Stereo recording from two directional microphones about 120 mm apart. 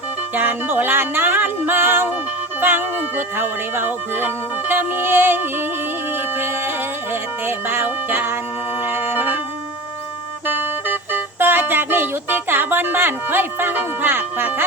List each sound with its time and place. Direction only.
0.3 s music: 15° right (ahead or behind)
6.1 s a sound: 15° right (ahead or behind)
8.8 s music: 15° right (ahead or behind)
10.4 s speech: 15° right (ahead or behind)